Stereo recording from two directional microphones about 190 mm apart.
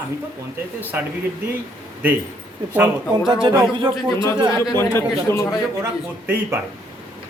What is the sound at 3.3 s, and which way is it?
Speech, 20° right (ahead or behind).